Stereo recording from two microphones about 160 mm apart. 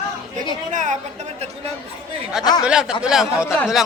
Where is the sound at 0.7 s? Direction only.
50° right (ahead or behind).